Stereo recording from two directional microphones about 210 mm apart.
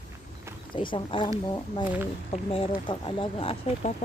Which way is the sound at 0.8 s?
25° left (ahead or behind).